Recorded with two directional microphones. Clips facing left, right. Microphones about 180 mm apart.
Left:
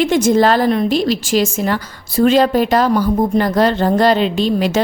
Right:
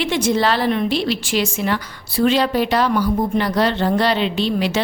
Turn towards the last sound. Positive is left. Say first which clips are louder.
# left 4 dB
turn(degrees=45)  # may be behind; listen again after turning